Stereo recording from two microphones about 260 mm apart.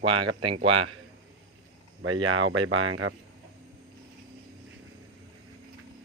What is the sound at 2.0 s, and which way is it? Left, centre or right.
Speech, right.